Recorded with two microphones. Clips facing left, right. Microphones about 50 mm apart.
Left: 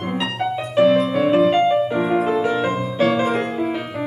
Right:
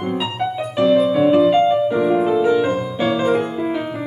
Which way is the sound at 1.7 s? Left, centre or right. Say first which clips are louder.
Right 2 dB; left.